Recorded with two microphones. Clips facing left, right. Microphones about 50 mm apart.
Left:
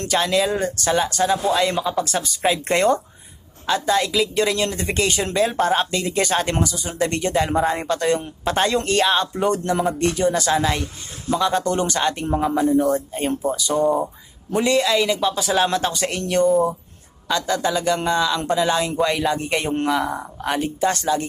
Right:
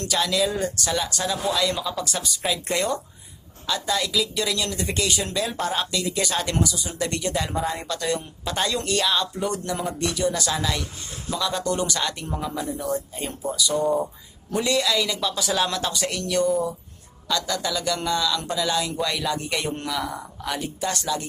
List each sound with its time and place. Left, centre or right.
0.0 s speech: left